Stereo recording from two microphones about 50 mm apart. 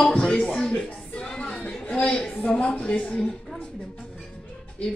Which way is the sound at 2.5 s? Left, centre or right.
Centre.